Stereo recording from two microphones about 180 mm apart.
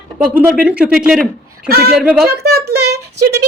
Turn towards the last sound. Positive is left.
turn(degrees=-65)  # may be behind; listen again after turning